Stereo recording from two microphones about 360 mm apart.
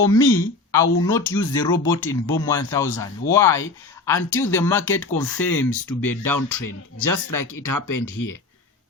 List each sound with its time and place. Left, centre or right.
0.0 s speech: centre
6.1 s speech: left